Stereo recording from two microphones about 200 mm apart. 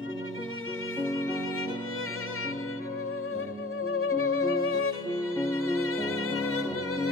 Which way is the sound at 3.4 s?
90° left.